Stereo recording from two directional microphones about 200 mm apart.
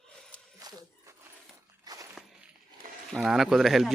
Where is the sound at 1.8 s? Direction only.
20° right (ahead or behind).